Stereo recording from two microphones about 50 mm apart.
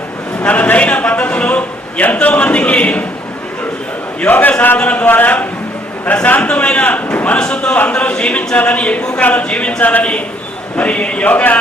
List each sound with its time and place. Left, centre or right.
0.4 s a sound: left
2.2 s a man's voice: left
4.3 s speech: left
6.2 s cattle: left
7.3 s a man's voice: centre